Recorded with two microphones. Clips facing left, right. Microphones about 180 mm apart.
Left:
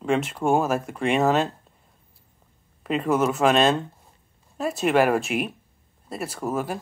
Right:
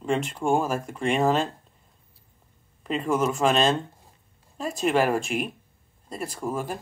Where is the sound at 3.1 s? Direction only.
5° left (ahead or behind).